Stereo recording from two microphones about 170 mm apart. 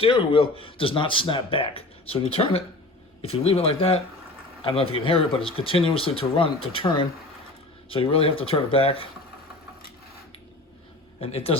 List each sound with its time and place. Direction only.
0.0 s speech: 30° left (ahead or behind)
11.2 s speech: 35° left (ahead or behind)